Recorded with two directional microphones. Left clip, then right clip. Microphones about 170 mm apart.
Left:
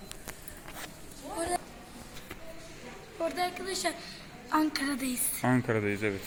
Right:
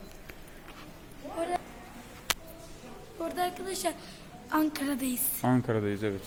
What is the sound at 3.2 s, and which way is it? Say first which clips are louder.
A woman's voice: even; 15° right (ahead or behind).